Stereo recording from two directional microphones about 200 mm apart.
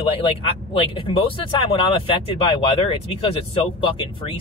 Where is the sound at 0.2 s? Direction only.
25° left (ahead or behind).